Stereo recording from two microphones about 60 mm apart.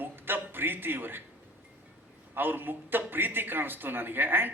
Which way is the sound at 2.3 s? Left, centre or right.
Right.